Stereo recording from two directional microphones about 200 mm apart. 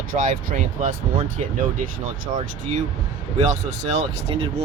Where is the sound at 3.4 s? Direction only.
35° right (ahead or behind).